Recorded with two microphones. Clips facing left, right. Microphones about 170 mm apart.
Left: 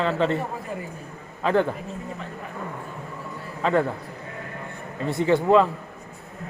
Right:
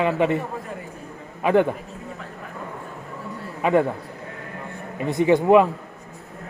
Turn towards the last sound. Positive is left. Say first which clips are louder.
# right 3 dB
turn(degrees=-15)  # may be behind; listen again after turning